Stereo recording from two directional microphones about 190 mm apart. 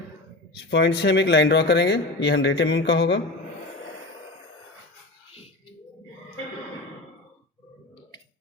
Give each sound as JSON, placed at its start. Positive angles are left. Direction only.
{"t": 0.7, "sound": "speech", "side_deg": 65}